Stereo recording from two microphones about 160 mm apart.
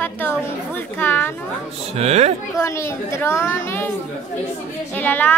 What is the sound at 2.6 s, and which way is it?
A woman's voice, 15° left (ahead or behind).